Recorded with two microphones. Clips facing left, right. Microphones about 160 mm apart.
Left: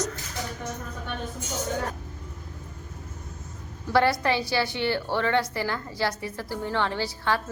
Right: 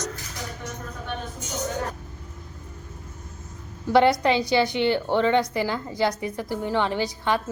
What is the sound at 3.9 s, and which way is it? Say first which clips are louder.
A woman's voice: right 4 dB; 20° right (ahead or behind).